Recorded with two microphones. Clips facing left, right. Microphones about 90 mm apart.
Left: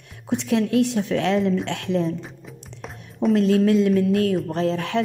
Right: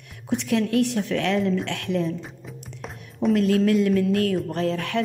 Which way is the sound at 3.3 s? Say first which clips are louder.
Left 2 dB; 25° left (ahead or behind).